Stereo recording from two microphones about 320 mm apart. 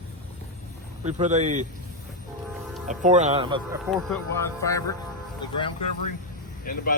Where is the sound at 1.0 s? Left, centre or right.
Right.